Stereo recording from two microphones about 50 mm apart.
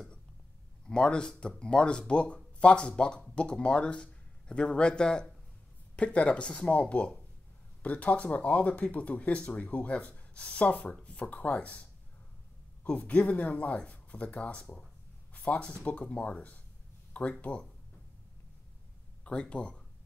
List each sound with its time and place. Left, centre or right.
0.8 s speech: centre
12.8 s speech: left
19.2 s speech: left